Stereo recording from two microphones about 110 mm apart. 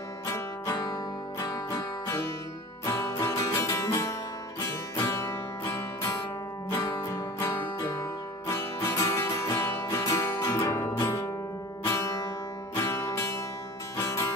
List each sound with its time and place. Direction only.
0.3 s music: 35° left (ahead or behind)
12.7 s music: 25° left (ahead or behind)